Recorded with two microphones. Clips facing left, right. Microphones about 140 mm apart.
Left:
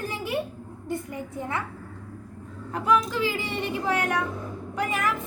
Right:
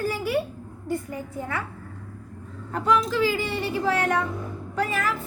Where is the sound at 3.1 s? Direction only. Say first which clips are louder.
Right 4 dB; 20° left (ahead or behind).